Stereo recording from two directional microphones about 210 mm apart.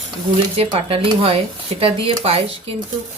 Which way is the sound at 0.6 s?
25° right (ahead or behind).